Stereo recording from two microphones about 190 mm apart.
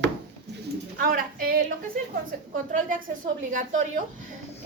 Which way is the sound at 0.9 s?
50° right (ahead or behind).